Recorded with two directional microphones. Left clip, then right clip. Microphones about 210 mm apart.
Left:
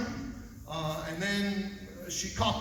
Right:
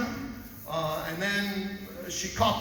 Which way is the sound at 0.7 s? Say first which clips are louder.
Right 6 dB; 25° left (ahead or behind).